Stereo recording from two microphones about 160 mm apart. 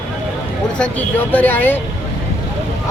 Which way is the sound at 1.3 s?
10° left (ahead or behind).